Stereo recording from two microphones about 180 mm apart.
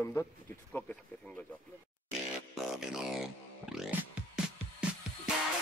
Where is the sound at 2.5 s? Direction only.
Centre (ahead or behind).